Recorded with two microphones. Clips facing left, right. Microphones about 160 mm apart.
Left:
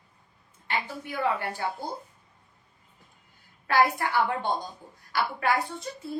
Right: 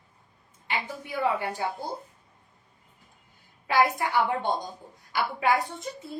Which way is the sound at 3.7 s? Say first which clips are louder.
Even; 15° right (ahead or behind).